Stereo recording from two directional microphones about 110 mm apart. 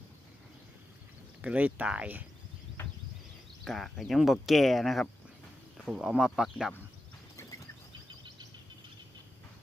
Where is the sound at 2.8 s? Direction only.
15° left (ahead or behind).